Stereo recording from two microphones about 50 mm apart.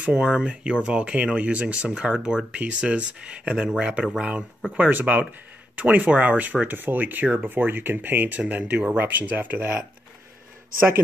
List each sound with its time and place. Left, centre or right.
0.0 s speech: right
4.7 s speech: right